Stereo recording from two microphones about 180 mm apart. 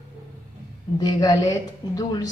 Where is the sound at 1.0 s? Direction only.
20° left (ahead or behind).